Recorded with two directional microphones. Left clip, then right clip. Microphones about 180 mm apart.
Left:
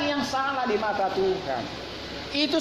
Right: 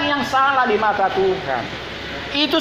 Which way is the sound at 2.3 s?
10° left (ahead or behind).